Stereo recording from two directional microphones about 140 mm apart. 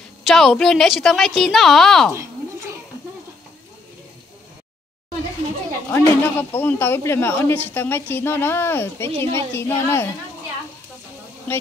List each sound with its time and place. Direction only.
0.2 s a woman's voice: centre (ahead or behind)
5.9 s a woman's voice: 15° left (ahead or behind)
11.5 s a woman's voice: 15° left (ahead or behind)